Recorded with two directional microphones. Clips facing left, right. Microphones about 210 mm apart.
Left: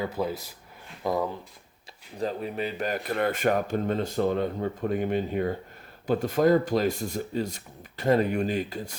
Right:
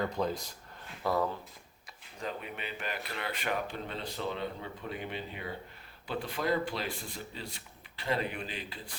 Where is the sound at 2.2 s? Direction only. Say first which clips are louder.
Left 10 dB; 35° left (ahead or behind).